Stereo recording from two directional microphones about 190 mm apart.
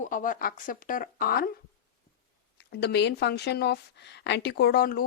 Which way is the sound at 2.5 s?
60° left (ahead or behind).